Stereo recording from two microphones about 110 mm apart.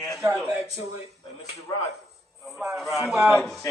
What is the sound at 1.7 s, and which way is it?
Speech, 35° left (ahead or behind).